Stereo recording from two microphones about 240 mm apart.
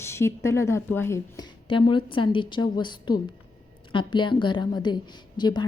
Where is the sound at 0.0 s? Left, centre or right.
Centre.